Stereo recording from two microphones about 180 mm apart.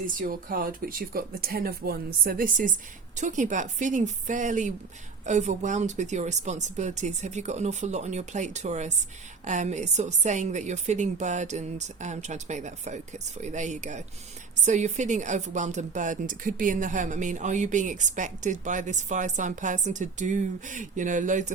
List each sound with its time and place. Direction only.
0.2 s a woman's voice: 50° right (ahead or behind)